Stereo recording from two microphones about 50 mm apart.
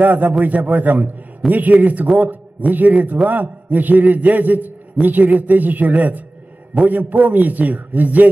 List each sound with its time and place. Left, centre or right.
0.0 s a man's voice: right